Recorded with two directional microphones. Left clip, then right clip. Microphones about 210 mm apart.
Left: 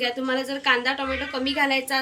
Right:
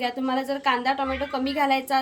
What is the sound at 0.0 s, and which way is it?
A woman's voice, 55° right (ahead or behind).